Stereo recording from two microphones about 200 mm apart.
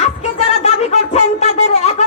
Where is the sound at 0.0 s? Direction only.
35° left (ahead or behind).